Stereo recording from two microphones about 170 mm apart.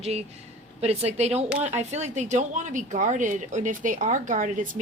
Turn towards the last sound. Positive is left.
turn(degrees=-50)  # may be behind; listen again after turning